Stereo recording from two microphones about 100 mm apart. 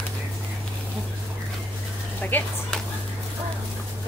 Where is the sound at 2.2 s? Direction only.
15° left (ahead or behind).